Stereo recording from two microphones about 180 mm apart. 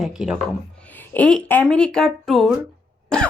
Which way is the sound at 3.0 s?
5° left (ahead or behind).